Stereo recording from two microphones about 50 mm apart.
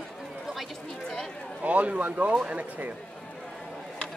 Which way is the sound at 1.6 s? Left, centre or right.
Right.